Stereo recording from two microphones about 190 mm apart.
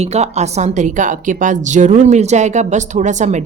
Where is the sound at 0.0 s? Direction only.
35° right (ahead or behind).